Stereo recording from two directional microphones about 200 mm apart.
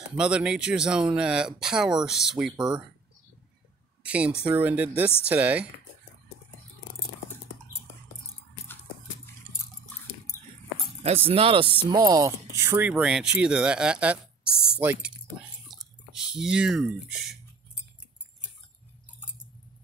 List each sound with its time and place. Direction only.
0.2 s speech: 5° right (ahead or behind)
4.0 s speech: 5° right (ahead or behind)
11.0 s speech: 30° right (ahead or behind); by 15.1 s 5° right (ahead or behind)
15.7 s drip: centre (ahead or behind)